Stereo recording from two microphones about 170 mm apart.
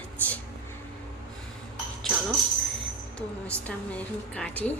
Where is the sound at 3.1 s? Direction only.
10° left (ahead or behind).